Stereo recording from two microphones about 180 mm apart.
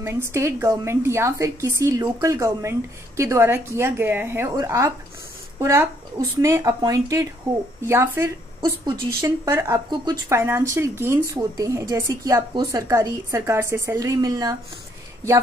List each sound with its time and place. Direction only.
0.0 s speech: 15° right (ahead or behind)